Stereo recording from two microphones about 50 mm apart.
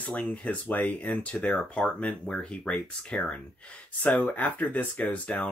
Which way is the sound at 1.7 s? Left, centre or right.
Left.